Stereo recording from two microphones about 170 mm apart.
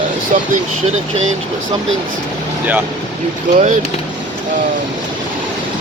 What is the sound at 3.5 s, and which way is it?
Speech, 50° right (ahead or behind).